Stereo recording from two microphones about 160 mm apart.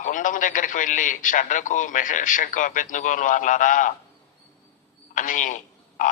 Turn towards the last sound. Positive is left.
turn(degrees=50)  # may be behind; listen again after turning